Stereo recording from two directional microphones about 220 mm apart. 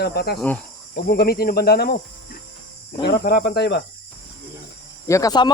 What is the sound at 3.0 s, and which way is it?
Speech, 45° left (ahead or behind).